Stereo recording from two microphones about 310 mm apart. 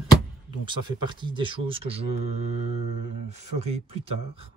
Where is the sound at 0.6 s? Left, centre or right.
Centre.